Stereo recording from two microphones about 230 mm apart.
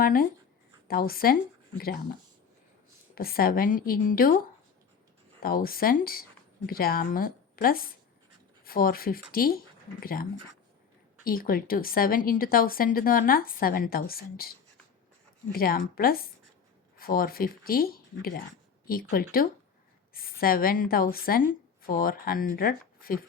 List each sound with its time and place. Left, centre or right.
0.0 s a woman's voice: left
3.2 s a woman's voice: left
5.4 s a woman's voice: left
15.5 s a woman's voice: left